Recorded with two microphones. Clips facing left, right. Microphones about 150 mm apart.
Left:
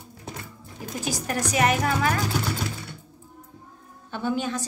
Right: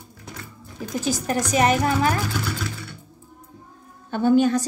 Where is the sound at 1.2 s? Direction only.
30° right (ahead or behind).